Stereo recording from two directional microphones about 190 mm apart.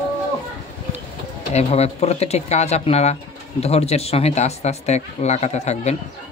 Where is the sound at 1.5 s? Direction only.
35° left (ahead or behind).